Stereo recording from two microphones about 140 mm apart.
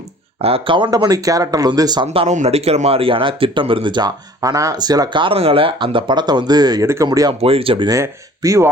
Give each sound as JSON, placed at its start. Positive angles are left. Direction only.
{"t": 0.4, "sound": "speech", "side_deg": -40}
{"t": 2.2, "sound": "speech", "side_deg": -50}
{"t": 7.4, "sound": "speech", "side_deg": -40}
{"t": 7.9, "sound": "speech", "side_deg": -25}